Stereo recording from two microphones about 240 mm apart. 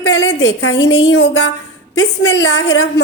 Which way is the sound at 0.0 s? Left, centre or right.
Left.